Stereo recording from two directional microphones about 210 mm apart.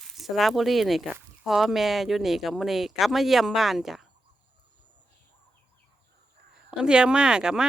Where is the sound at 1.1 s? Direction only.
Centre (ahead or behind).